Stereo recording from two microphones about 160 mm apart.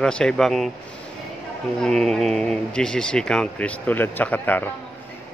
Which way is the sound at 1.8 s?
5° left (ahead or behind).